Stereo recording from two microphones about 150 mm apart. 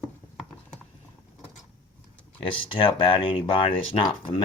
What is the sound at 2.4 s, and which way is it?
Speech, 35° left (ahead or behind).